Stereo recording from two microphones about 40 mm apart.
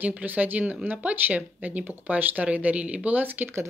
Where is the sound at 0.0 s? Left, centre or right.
Right.